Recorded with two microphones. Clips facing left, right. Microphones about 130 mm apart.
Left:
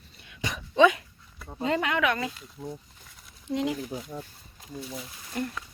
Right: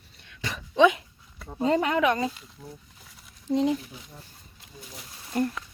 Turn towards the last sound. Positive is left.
turn(degrees=-40)  # may be behind; listen again after turning